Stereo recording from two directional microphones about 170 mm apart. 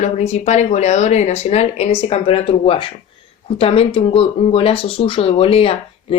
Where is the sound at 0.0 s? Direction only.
40° left (ahead or behind).